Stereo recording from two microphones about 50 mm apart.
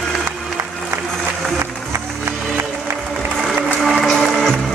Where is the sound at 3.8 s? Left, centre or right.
Centre.